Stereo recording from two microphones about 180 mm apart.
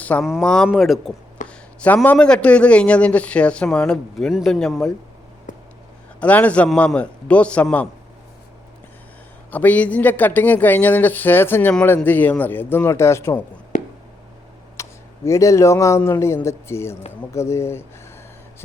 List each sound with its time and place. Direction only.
0.0 s speech: 10° left (ahead or behind)
5.5 s a sound: 45° left (ahead or behind)
6.1 s speech: 10° left (ahead or behind)
9.5 s speech: 10° left (ahead or behind)
13.7 s a sound: 40° left (ahead or behind)
14.8 s speech: 15° left (ahead or behind)